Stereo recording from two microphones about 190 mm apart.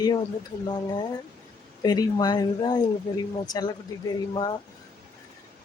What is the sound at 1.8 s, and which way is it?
Speech, 20° left (ahead or behind).